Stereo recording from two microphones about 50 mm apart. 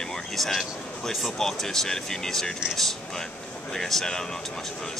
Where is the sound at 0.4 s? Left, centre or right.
Centre.